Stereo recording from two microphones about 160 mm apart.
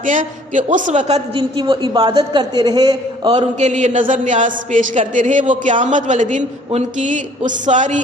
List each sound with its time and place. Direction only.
0.0 s a man's voice: 55° right (ahead or behind); by 3.3 s 25° right (ahead or behind)
3.3 s speech: 45° right (ahead or behind)